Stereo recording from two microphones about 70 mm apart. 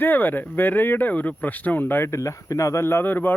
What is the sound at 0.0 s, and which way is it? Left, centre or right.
Speech, left.